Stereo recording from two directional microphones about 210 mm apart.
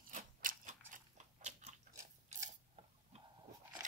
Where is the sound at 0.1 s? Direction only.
40° right (ahead or behind).